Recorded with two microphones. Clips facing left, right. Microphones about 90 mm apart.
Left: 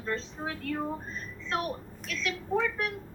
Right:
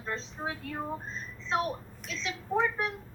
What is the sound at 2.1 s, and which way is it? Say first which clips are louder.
Speech: left 1 dB; 25° right (ahead or behind).